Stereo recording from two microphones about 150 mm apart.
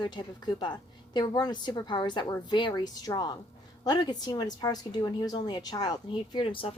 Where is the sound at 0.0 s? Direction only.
30° left (ahead or behind).